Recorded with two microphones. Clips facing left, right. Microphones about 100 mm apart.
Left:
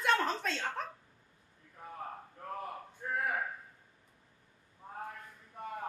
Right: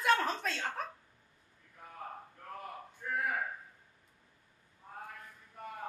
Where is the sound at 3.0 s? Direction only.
35° left (ahead or behind).